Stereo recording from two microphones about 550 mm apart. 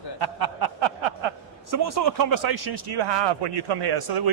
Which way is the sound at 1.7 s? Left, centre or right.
Right.